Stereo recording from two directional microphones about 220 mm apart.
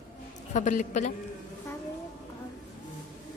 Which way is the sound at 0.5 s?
35° left (ahead or behind).